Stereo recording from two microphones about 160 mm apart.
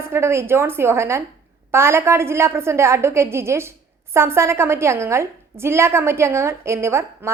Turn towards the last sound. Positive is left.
turn(degrees=-15)  # may be behind; listen again after turning